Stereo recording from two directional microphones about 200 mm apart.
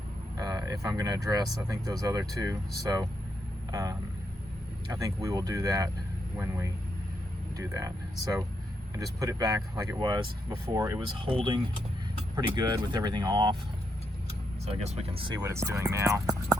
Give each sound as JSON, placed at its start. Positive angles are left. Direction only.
{"t": 0.3, "sound": "speech", "side_deg": -20}
{"t": 7.7, "sound": "speech", "side_deg": -15}
{"t": 14.7, "sound": "speech", "side_deg": -30}